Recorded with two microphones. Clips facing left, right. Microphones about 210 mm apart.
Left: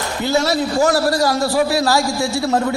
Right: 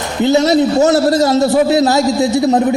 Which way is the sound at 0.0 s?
20° right (ahead or behind).